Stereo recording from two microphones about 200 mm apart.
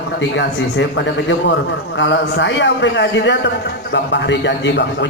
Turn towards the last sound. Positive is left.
turn(degrees=60)  # may be behind; listen again after turning